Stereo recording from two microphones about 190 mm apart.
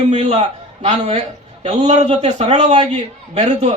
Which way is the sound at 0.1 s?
35° right (ahead or behind).